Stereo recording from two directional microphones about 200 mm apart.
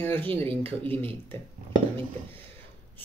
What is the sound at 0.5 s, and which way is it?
Speech, 25° right (ahead or behind).